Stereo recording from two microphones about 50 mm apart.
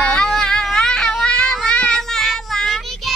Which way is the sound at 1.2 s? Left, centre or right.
Centre.